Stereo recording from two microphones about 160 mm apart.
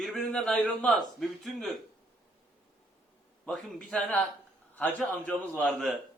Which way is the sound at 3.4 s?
5° left (ahead or behind).